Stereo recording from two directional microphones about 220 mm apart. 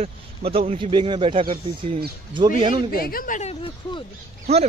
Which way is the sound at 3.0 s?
40° left (ahead or behind).